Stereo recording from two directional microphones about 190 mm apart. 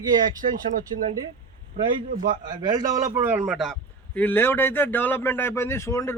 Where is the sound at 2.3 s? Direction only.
25° right (ahead or behind).